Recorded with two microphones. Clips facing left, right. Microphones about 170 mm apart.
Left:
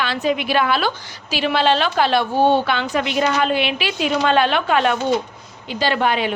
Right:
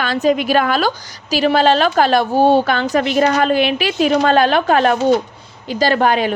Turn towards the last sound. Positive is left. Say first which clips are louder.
# right 4 dB
turn(degrees=-45)  # may be behind; listen again after turning